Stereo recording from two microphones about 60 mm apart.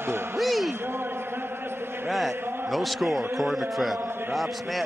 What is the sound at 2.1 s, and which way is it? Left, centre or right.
A man's voice, centre.